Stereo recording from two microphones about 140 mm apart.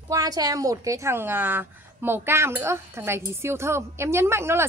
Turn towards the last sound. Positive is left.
turn(degrees=-20)  # may be behind; listen again after turning